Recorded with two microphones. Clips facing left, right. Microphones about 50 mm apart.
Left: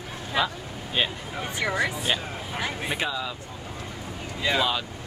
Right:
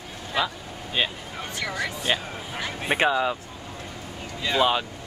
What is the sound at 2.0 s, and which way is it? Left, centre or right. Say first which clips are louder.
Speech: right 1 dB; centre.